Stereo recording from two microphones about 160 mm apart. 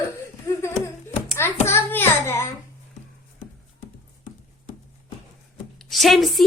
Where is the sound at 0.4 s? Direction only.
15° left (ahead or behind).